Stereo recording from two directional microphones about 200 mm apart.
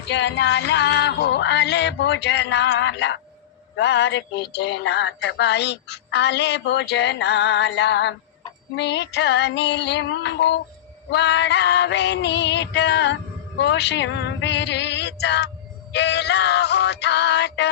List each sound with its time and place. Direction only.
0.1 s speech: 60° left (ahead or behind)
13.6 s a sound: 60° left (ahead or behind)
15.9 s speech: 60° left (ahead or behind)